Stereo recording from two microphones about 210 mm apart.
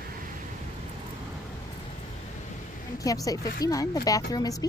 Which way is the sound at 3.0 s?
15° left (ahead or behind).